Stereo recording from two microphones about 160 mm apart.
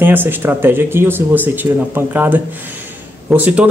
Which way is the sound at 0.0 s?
10° right (ahead or behind).